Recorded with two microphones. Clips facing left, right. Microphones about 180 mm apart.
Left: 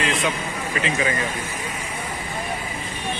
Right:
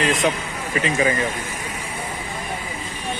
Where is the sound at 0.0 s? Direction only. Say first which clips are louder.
Right 4 dB; 40° right (ahead or behind).